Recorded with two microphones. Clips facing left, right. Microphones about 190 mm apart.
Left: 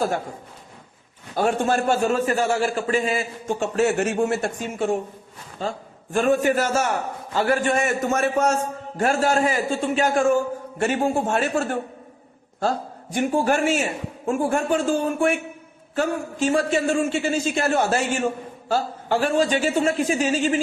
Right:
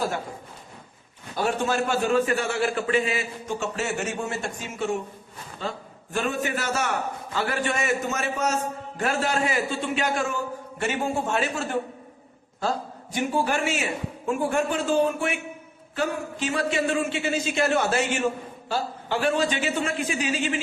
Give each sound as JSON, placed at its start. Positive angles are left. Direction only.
{"t": 1.4, "sound": "a man's voice", "side_deg": 50}
{"t": 6.1, "sound": "a man's voice", "side_deg": 45}
{"t": 13.1, "sound": "a man's voice", "side_deg": 50}